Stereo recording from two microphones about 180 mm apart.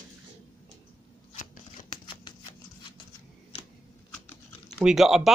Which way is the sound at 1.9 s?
25° left (ahead or behind).